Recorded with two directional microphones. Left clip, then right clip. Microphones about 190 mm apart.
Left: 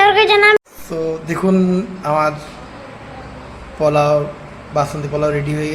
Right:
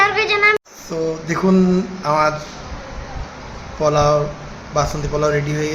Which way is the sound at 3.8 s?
10° left (ahead or behind).